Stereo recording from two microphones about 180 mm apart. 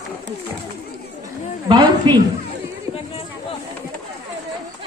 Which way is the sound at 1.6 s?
25° right (ahead or behind).